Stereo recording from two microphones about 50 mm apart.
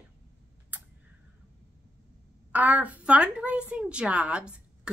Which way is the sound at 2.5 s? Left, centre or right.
Right.